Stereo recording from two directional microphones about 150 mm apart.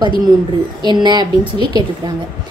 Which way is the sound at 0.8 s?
30° right (ahead or behind).